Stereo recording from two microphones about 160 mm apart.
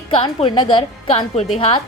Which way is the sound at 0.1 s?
30° left (ahead or behind).